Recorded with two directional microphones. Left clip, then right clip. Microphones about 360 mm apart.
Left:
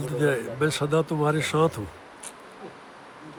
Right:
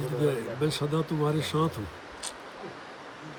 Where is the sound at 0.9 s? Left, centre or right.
Left.